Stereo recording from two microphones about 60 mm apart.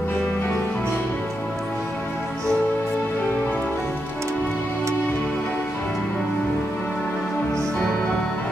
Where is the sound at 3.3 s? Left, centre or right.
Left.